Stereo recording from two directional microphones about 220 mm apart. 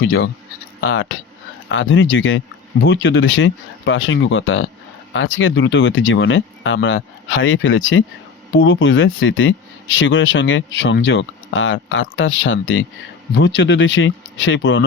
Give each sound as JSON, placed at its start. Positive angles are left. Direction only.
{"t": 0.0, "sound": "speech", "side_deg": 70}